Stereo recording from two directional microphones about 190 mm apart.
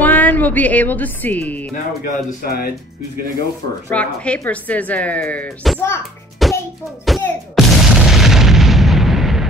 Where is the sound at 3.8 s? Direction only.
5° left (ahead or behind).